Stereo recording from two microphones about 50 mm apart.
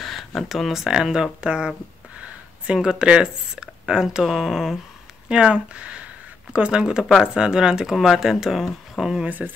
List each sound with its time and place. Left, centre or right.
0.0 s a sound: centre
0.8 s speech: centre
5.3 s speech: right
7.0 s speech: centre
9.2 s speech: right